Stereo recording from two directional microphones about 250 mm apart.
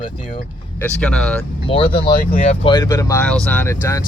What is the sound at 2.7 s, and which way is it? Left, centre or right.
Speech, centre.